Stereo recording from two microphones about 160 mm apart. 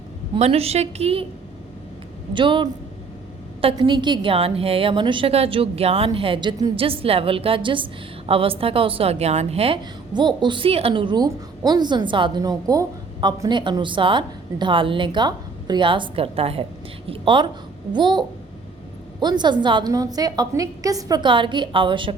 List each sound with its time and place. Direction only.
0.3 s a woman's voice: 40° right (ahead or behind)
2.3 s a woman's voice: 30° right (ahead or behind)
3.8 s a woman's voice: 30° right (ahead or behind)